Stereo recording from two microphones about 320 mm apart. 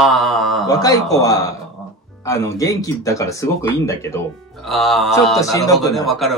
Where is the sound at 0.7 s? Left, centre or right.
Centre.